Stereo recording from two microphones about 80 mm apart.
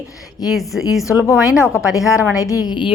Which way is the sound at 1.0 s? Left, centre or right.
Left.